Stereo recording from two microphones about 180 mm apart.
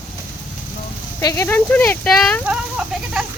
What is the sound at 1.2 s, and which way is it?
Speech, 15° left (ahead or behind).